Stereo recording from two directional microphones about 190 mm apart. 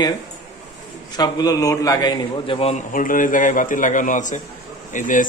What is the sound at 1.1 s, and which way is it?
A man's voice, 20° left (ahead or behind).